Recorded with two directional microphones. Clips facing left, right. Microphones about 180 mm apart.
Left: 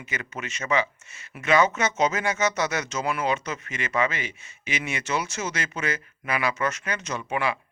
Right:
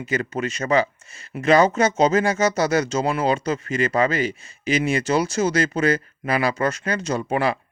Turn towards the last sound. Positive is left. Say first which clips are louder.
# right 6 dB
turn(degrees=-35)  # may be behind; listen again after turning